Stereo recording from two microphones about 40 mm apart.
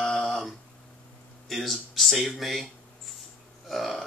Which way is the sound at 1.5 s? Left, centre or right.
Centre.